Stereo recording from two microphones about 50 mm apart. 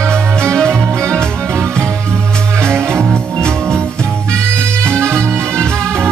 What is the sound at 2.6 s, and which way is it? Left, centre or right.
Music, right.